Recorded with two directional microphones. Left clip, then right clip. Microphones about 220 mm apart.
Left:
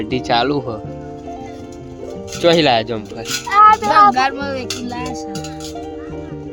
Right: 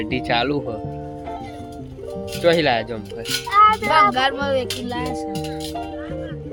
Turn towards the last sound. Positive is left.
turn(degrees=0)  # may be behind; listen again after turning